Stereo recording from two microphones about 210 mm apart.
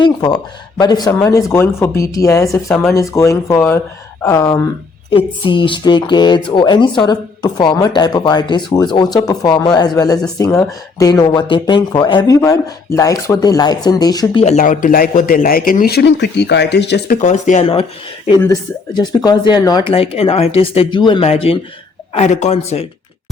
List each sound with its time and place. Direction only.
0.0 s speech: 20° left (ahead or behind)
14.4 s a man's voice: 35° left (ahead or behind); by 17.2 s 55° left (ahead or behind)
17.2 s speech: 35° left (ahead or behind)
18.9 s speech: 20° left (ahead or behind)